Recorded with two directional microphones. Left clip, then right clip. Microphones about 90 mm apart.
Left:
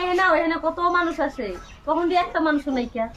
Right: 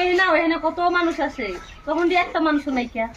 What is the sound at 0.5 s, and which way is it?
Speech, 35° left (ahead or behind).